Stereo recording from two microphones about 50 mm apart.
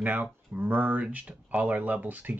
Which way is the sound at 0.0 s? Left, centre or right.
Right.